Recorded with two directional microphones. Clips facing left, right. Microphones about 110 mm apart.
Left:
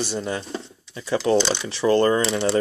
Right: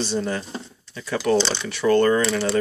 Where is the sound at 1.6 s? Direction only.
30° left (ahead or behind).